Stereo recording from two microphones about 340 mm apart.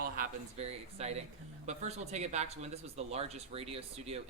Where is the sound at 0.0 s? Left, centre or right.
Right.